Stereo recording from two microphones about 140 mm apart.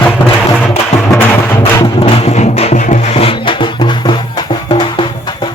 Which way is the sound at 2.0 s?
45° left (ahead or behind).